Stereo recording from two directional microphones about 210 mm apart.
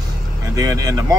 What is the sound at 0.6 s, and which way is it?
Speech, 15° right (ahead or behind).